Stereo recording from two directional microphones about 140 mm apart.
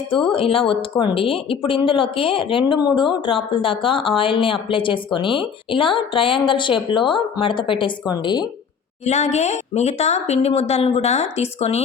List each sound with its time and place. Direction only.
0.3 s speech: 40° left (ahead or behind)
9.0 s speech: 55° left (ahead or behind)